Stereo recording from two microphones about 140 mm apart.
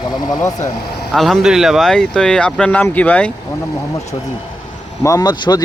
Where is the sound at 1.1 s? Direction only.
Centre (ahead or behind).